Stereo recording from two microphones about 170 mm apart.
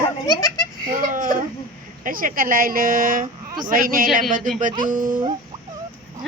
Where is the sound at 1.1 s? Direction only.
50° right (ahead or behind).